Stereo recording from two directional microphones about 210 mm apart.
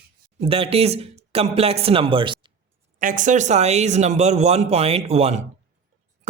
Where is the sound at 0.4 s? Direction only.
25° right (ahead or behind).